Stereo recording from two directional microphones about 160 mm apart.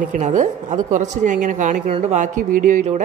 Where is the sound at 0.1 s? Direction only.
50° right (ahead or behind).